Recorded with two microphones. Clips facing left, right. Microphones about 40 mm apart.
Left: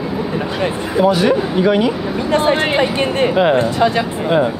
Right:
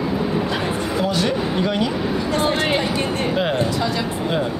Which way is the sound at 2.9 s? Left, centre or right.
Left.